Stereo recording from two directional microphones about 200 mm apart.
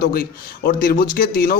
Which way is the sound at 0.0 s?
50° left (ahead or behind).